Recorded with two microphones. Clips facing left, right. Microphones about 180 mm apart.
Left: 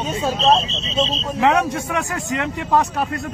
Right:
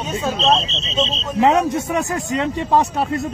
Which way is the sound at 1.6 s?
25° right (ahead or behind).